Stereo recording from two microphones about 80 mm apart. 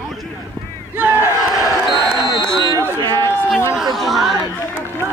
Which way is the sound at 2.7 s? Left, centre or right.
Right.